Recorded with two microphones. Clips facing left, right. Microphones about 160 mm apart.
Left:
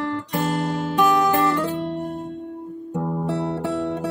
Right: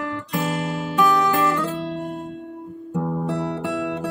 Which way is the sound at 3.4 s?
30° left (ahead or behind).